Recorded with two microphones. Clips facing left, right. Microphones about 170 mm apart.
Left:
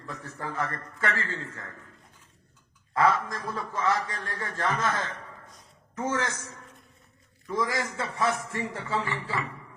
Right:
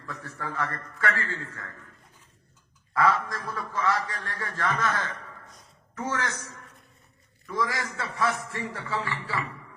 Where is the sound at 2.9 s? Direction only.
25° left (ahead or behind).